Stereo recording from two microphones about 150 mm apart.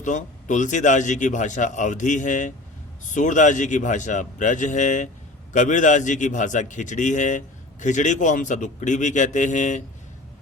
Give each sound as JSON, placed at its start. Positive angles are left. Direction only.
{"t": 0.0, "sound": "a man's voice", "side_deg": 55}